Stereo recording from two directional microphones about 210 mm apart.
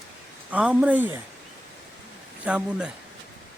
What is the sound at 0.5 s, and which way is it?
Speech, 5° right (ahead or behind).